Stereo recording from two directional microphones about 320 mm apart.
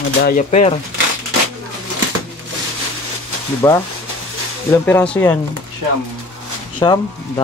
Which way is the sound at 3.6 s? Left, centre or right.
Centre.